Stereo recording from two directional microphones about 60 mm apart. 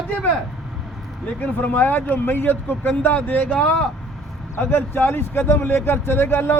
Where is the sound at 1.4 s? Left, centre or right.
Left.